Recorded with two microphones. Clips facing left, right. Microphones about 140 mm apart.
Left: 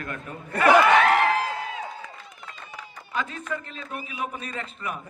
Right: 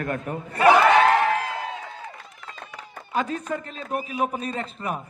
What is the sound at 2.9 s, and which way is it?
A man's voice, 45° right (ahead or behind).